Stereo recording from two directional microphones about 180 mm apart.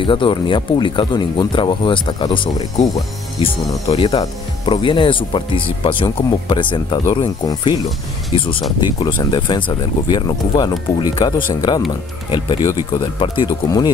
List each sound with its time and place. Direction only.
0.0 s speech: 30° left (ahead or behind)
3.9 s speech: 30° left (ahead or behind)
9.0 s speech: 25° left (ahead or behind)